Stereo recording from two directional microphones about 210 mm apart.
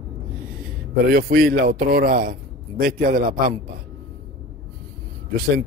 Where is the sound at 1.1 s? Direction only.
45° right (ahead or behind).